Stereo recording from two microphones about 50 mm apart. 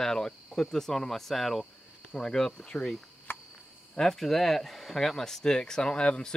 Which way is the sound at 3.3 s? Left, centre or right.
Left.